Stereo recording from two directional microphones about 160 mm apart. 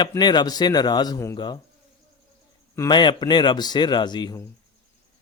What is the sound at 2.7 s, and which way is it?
A man's voice, 25° left (ahead or behind).